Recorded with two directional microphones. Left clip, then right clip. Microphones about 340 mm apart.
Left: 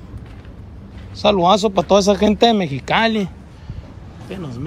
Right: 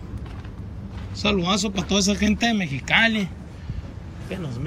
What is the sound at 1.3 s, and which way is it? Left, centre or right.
Speech, left.